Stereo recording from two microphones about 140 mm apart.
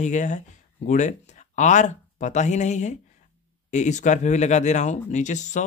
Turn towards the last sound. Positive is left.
turn(degrees=60)  # may be behind; listen again after turning